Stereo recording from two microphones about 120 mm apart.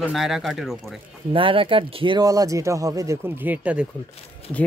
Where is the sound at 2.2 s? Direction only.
30° right (ahead or behind); by 3.8 s 10° right (ahead or behind).